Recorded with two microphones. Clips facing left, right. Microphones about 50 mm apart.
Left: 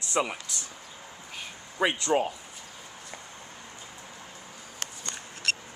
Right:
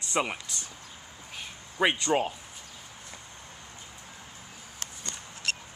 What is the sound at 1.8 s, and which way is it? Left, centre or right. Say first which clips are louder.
Speech: even; right.